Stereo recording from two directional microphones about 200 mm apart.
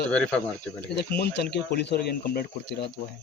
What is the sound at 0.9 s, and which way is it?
Speech, 55° left (ahead or behind).